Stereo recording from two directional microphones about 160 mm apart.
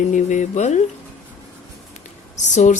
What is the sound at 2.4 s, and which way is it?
Speech, 50° left (ahead or behind).